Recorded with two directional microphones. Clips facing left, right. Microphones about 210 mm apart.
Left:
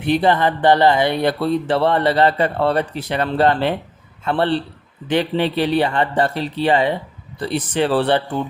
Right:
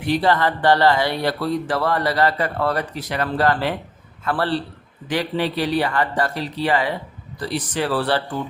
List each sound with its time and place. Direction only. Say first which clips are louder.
0.0 s speech: left 3 dB; 20° left (ahead or behind)